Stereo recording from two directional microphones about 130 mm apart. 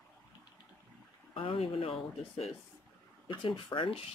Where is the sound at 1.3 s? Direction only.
45° left (ahead or behind).